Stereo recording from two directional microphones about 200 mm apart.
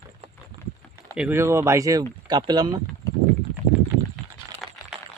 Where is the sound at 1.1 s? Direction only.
10° right (ahead or behind).